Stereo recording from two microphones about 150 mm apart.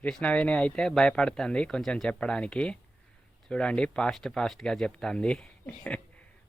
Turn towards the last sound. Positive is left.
turn(degrees=10)  # may be behind; listen again after turning